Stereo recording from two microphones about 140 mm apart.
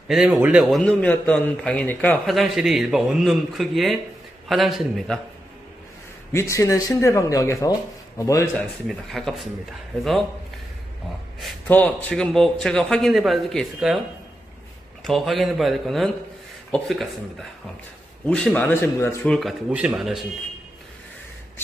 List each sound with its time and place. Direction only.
0.1 s a man's voice: 5° right (ahead or behind); by 2.1 s 10° left (ahead or behind)
2.2 s a man's voice: centre (ahead or behind)
6.3 s speech: 20° left (ahead or behind)
8.8 s a man's voice: centre (ahead or behind)
11.6 s a man's voice: 10° left (ahead or behind)
15.0 s a man's voice: centre (ahead or behind); by 19.1 s 15° left (ahead or behind)
19.2 s a man's voice: 5° left (ahead or behind)
19.7 s a man's voice: 10° right (ahead or behind)